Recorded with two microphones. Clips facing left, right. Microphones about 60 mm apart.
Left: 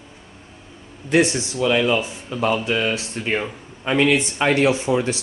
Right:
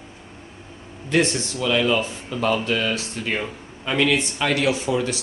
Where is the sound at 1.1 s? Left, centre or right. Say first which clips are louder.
Left 3 dB; centre.